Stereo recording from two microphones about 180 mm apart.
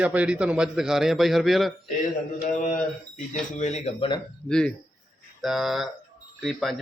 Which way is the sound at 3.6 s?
40° left (ahead or behind).